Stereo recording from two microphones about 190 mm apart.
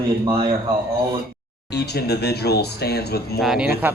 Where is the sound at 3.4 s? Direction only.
Centre (ahead or behind).